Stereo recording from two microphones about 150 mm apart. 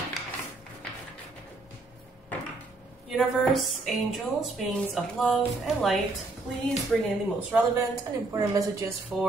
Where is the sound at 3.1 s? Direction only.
Centre (ahead or behind).